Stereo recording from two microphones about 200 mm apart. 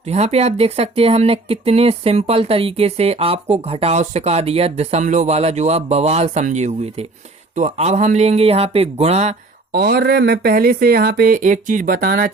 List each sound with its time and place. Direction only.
0.1 s speech: 30° right (ahead or behind)
9.7 s speech: 50° right (ahead or behind)